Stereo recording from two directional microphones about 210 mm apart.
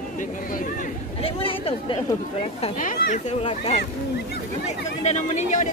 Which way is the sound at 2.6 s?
35° left (ahead or behind).